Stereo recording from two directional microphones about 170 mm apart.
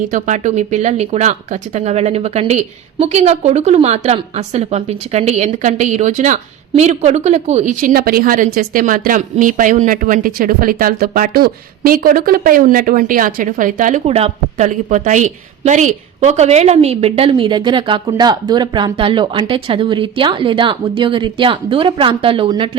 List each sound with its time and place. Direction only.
0.1 s a woman's voice: 45° right (ahead or behind); by 22.8 s 30° right (ahead or behind)